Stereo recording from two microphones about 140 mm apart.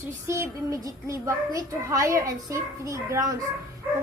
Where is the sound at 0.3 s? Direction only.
20° right (ahead or behind).